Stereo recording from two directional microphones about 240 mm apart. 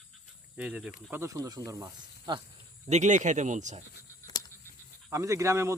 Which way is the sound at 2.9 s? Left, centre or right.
Right.